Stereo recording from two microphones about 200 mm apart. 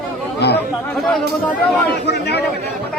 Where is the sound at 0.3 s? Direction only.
55° left (ahead or behind).